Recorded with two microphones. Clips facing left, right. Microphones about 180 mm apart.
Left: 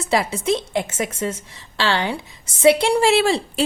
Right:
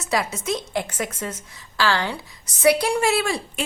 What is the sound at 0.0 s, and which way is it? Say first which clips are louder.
Speech: left 4 dB; 30° left (ahead or behind).